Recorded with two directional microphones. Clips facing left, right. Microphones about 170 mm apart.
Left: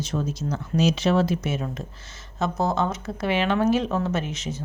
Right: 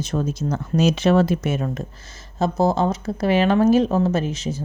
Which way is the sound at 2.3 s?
30° right (ahead or behind).